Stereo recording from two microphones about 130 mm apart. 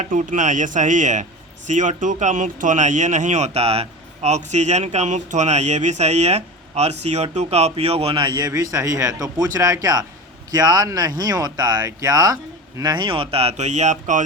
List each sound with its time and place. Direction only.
0.0 s speech: 80° right